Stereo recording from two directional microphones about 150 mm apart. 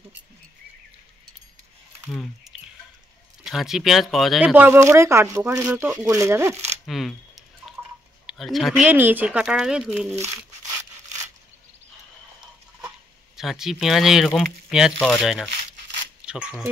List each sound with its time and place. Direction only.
2.5 s drip: centre (ahead or behind)
3.4 s speech: 5° right (ahead or behind)
4.6 s speech: 15° right (ahead or behind)
6.9 s a sound: centre (ahead or behind)
8.3 s speech: centre (ahead or behind)
13.4 s speech: 5° right (ahead or behind)
16.2 s a sound: 5° right (ahead or behind)